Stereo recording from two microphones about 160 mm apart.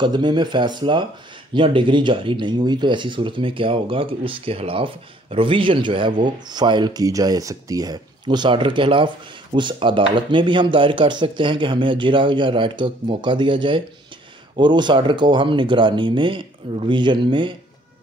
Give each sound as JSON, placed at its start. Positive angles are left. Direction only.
{"t": 0.0, "sound": "speech", "side_deg": -25}